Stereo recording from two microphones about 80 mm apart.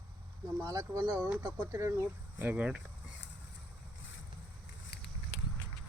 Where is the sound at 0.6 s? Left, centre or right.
Right.